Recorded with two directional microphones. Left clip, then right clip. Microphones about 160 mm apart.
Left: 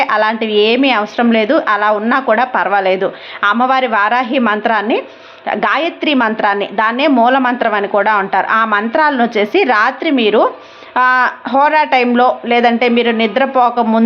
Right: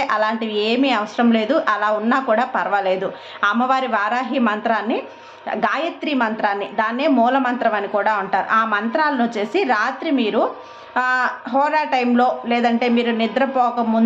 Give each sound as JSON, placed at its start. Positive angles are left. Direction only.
{"t": 0.0, "sound": "a woman's voice", "side_deg": 25}